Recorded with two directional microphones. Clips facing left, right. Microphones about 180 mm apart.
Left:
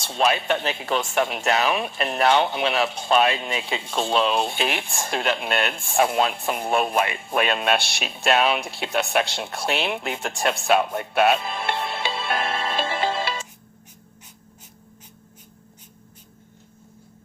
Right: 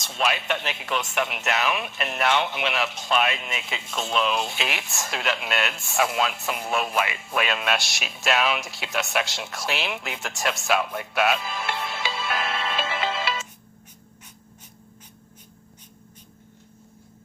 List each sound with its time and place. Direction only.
0.0 s speech: 30° left (ahead or behind)